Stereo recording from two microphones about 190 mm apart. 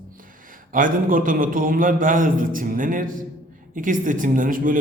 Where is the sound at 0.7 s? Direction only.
45° right (ahead or behind).